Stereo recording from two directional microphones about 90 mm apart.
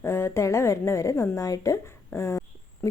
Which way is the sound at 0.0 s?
25° left (ahead or behind).